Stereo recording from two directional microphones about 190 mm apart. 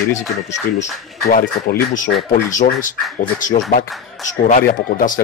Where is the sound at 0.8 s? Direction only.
45° left (ahead or behind).